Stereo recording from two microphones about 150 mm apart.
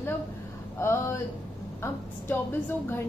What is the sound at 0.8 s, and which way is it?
A woman's voice, 15° left (ahead or behind).